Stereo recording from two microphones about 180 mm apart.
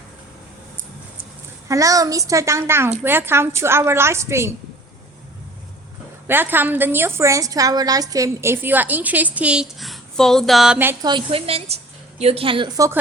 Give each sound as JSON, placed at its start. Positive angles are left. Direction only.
{"t": 1.2, "sound": "a woman's voice", "side_deg": -15}
{"t": 6.2, "sound": "a woman's voice", "side_deg": -10}
{"t": 11.0, "sound": "a woman's voice", "side_deg": -30}